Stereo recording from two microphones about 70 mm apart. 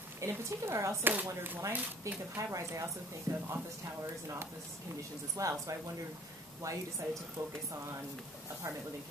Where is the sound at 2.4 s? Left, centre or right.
Right.